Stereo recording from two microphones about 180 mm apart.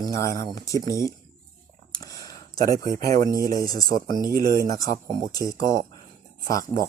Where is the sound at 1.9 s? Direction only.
20° left (ahead or behind).